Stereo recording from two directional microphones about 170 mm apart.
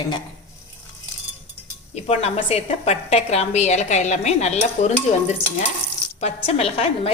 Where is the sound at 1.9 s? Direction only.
40° left (ahead or behind).